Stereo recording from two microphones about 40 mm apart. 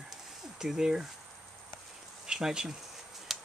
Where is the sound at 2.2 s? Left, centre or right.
Centre.